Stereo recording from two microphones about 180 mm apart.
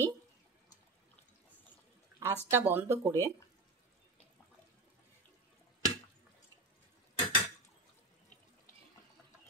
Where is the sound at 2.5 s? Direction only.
10° right (ahead or behind).